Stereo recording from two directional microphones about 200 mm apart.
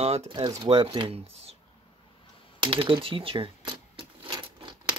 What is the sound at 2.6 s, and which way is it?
Typewriter, 30° right (ahead or behind).